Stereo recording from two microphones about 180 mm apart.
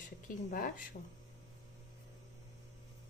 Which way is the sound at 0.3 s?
50° left (ahead or behind).